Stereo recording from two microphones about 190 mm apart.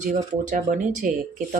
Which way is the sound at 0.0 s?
40° right (ahead or behind).